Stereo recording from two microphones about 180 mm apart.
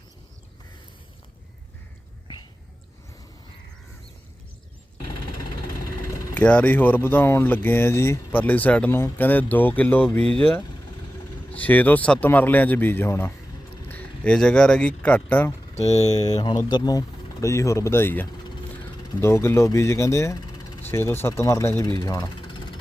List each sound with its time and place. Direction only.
6.3 s speech: 5° left (ahead or behind)
15.7 s speech: 35° left (ahead or behind)
16.4 s speech: 25° left (ahead or behind)